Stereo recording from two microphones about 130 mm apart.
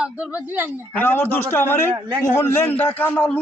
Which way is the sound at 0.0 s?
10° right (ahead or behind).